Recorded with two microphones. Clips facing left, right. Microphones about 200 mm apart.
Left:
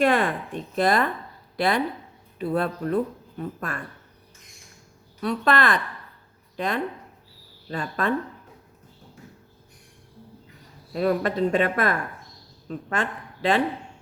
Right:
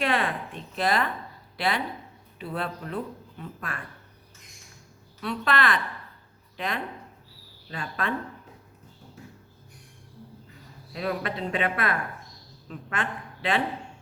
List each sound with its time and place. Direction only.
0.0 s speech: 45° left (ahead or behind)
5.2 s speech: 45° left (ahead or behind)
7.7 s speech: 45° left (ahead or behind)
10.9 s a woman's voice: 45° left (ahead or behind)